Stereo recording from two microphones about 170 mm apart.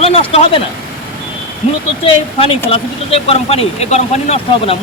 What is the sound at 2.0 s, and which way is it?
Speech, 35° left (ahead or behind).